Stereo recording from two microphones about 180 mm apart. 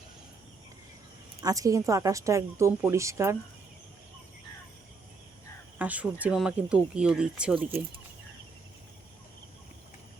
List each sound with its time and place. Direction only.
1.4 s a woman's voice: 20° right (ahead or behind)
5.8 s speech: 10° right (ahead or behind)